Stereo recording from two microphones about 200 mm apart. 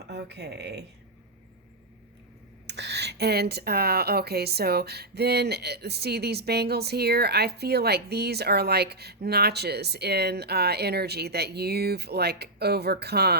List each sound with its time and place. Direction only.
0.1 s speech: 55° right (ahead or behind)
2.6 s speech: 60° right (ahead or behind)